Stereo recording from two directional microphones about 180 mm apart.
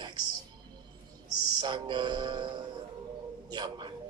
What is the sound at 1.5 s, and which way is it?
A man's voice, 25° right (ahead or behind).